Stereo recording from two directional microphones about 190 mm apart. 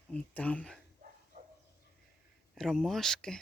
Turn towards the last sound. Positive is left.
turn(degrees=5)  # may be behind; listen again after turning